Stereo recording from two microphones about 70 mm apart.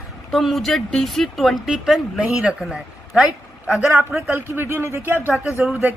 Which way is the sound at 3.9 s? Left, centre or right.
Right.